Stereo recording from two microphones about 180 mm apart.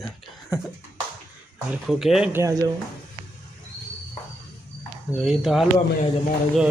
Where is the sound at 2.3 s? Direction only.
20° right (ahead or behind).